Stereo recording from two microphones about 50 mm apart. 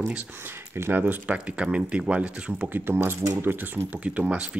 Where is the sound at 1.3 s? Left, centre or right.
Right.